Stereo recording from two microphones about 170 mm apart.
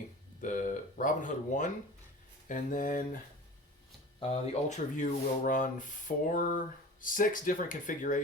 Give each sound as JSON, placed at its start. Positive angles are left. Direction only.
{"t": 0.4, "sound": "speech", "side_deg": 50}
{"t": 4.2, "sound": "speech", "side_deg": 40}